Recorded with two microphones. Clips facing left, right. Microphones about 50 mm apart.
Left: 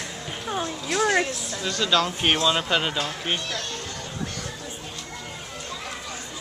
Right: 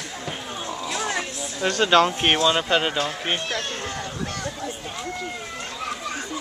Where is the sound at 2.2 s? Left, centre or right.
Centre.